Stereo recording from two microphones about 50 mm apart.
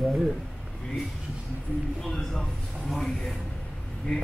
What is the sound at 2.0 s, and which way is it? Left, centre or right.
Speech, centre.